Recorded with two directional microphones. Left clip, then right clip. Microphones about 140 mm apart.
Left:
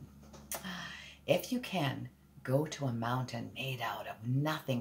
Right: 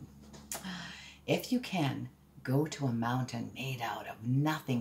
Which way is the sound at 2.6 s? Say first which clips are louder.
Right 2 dB; 15° left (ahead or behind).